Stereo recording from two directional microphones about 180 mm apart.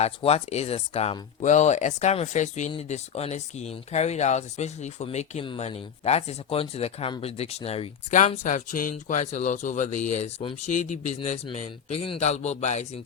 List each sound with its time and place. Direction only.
0.0 s speech: 35° left (ahead or behind)